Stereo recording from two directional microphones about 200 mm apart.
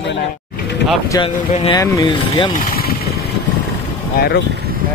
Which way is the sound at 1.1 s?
20° left (ahead or behind).